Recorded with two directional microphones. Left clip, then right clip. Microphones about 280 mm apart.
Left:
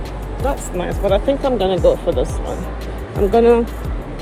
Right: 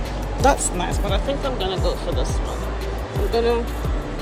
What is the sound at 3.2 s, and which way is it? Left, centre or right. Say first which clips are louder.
Speech: left 11 dB; left.